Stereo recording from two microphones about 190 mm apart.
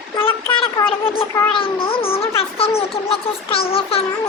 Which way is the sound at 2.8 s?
30° left (ahead or behind).